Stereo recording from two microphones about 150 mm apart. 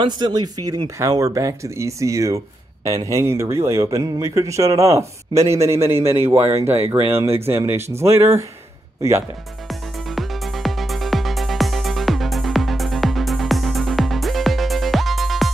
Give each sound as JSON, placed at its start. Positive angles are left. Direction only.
{"t": 0.0, "sound": "speech", "side_deg": -30}
{"t": 9.7, "sound": "music", "side_deg": 0}